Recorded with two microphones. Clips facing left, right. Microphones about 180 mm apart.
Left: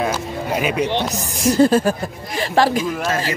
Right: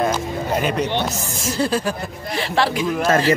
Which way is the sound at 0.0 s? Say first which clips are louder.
Right 1 dB; 5° left (ahead or behind).